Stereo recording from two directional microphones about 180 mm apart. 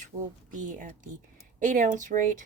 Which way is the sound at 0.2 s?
45° right (ahead or behind).